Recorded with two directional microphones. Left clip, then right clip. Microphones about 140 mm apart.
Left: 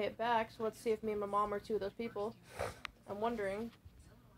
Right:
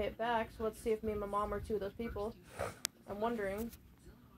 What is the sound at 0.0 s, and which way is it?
A woman's voice, 10° left (ahead or behind).